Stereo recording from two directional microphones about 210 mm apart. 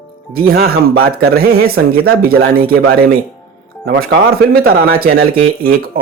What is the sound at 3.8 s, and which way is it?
Speech, 55° right (ahead or behind).